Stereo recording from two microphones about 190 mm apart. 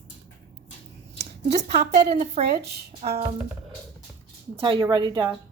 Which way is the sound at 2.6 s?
60° right (ahead or behind).